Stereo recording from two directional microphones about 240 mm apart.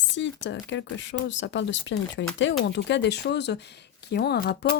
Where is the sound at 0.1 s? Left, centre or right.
Left.